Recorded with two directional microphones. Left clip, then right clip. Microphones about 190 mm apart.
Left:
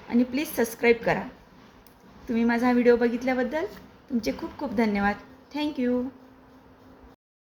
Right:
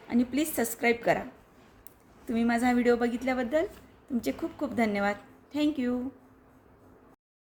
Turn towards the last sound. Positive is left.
turn(degrees=-25)  # may be behind; listen again after turning